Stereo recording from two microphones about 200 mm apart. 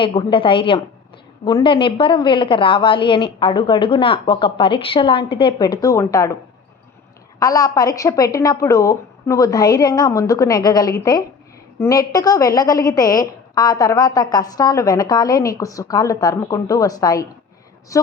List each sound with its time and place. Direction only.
0.0 s a woman's voice: 25° left (ahead or behind)
7.3 s a woman's voice: 20° left (ahead or behind)